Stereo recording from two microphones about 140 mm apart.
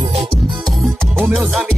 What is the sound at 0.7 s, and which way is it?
Music, centre (ahead or behind).